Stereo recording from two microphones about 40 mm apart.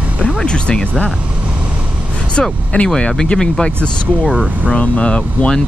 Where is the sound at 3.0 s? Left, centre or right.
Left.